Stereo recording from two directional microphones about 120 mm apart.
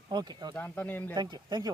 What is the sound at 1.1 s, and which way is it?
Speech, 35° right (ahead or behind).